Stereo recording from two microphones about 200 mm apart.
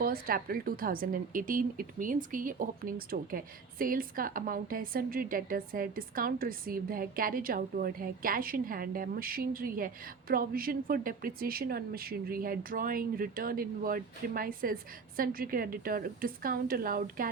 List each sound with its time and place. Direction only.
0.0 s a woman's voice: 45° right (ahead or behind)